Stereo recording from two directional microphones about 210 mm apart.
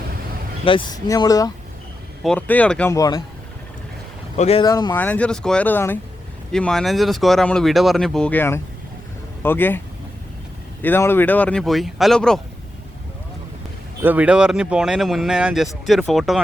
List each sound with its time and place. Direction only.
0.6 s speech: 25° left (ahead or behind)
2.2 s speech: 5° left (ahead or behind)
4.4 s speech: 30° left (ahead or behind)
4.6 s speech: 20° left (ahead or behind)
4.9 s speech: 5° left (ahead or behind)
10.8 s speech: 10° left (ahead or behind)
14.0 s speech: 5° right (ahead or behind)